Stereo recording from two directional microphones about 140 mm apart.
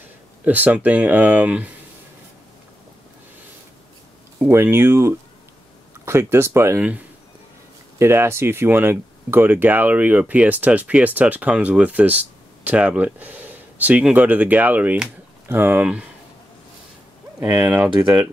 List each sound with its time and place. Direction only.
0.5 s speech: 10° right (ahead or behind)
4.4 s speech: 15° right (ahead or behind)
8.0 s speech: 15° right (ahead or behind)
17.4 s speech: 15° right (ahead or behind)